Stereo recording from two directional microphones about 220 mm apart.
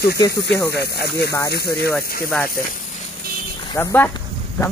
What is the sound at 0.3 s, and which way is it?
Speech, 50° left (ahead or behind).